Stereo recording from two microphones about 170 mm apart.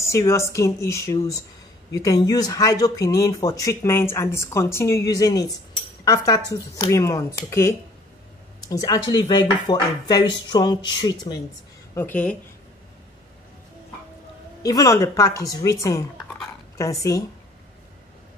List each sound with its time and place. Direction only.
0.0 s speech: 20° left (ahead or behind)
11.9 s speech: 10° left (ahead or behind)
14.6 s speech: 20° left (ahead or behind)